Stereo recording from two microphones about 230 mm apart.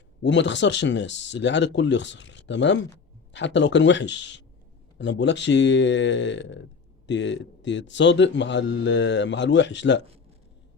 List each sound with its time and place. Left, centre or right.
0.2 s a man's voice: left